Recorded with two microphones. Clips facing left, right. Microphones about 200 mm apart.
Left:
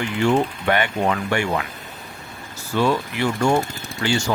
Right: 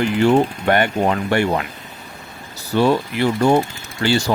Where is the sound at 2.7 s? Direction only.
35° right (ahead or behind).